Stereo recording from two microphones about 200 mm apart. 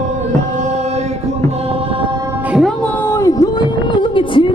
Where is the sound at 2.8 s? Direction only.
10° left (ahead or behind); by 4.5 s 25° left (ahead or behind).